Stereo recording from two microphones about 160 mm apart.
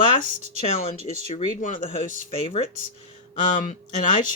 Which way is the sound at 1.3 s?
50° left (ahead or behind).